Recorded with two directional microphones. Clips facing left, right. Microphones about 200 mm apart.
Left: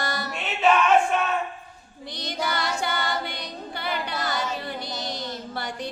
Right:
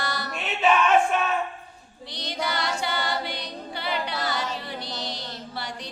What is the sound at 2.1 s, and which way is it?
A capella, 50° left (ahead or behind).